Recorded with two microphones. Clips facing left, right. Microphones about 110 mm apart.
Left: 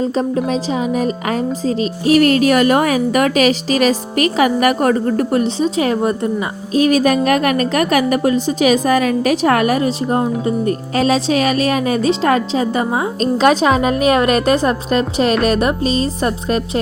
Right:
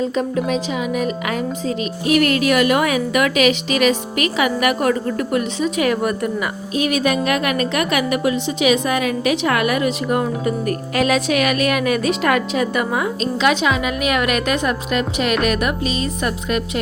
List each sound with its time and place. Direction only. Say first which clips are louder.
0.0 s speech: left 3 dB; 35° left (ahead or behind)
13.1 s speech: left 7 dB; 40° left (ahead or behind)